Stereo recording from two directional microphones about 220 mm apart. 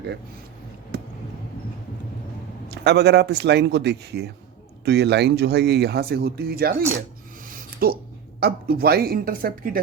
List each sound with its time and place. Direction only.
2.6 s speech: 50° right (ahead or behind)
7.5 s a sound: 45° right (ahead or behind)
8.4 s speech: 45° right (ahead or behind)